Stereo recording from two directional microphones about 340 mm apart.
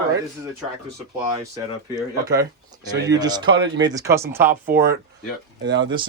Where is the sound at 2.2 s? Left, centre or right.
Centre.